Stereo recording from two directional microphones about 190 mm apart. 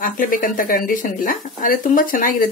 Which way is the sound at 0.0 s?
45° left (ahead or behind).